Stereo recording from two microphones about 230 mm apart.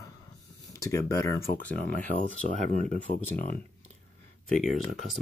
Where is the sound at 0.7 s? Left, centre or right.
Centre.